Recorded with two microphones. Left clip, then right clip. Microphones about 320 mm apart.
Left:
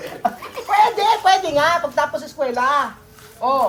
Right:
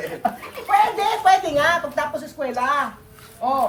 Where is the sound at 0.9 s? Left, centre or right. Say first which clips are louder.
Left 2 dB; centre.